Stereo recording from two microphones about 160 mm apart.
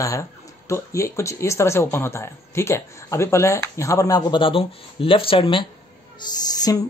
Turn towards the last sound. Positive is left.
turn(degrees=25)  # may be behind; listen again after turning